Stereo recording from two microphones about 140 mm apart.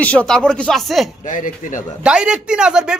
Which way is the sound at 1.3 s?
65° left (ahead or behind).